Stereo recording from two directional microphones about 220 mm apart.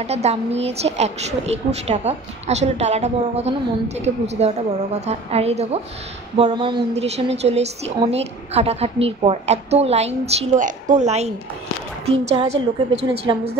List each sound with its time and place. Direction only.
0.0 s a woman's voice: 30° right (ahead or behind)